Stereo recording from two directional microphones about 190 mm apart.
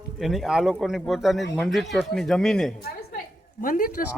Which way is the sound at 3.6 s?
45° left (ahead or behind).